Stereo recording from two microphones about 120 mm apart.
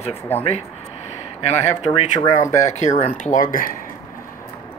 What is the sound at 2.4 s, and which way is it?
Speech, 25° left (ahead or behind).